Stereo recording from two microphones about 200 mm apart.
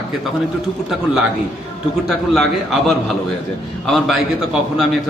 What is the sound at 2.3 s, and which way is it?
Speech, centre (ahead or behind).